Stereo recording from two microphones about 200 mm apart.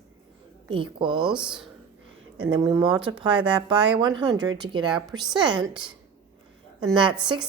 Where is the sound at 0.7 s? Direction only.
25° right (ahead or behind).